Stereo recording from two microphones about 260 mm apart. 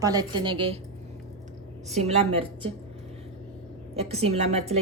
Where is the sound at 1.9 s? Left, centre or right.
Right.